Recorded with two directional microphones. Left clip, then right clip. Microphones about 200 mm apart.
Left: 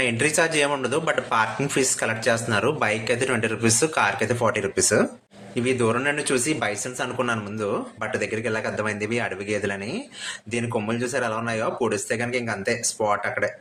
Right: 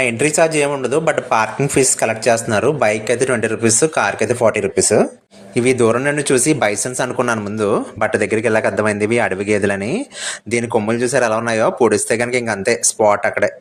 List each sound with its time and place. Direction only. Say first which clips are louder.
0.0 s speech: right 7 dB; 25° right (ahead or behind)
5.5 s speech: right 8 dB; 35° right (ahead or behind)